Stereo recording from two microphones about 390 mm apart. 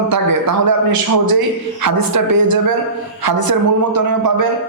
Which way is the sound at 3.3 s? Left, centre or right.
Right.